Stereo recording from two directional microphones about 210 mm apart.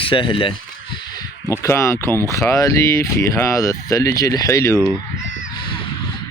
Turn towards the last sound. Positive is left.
turn(degrees=15)  # may be behind; listen again after turning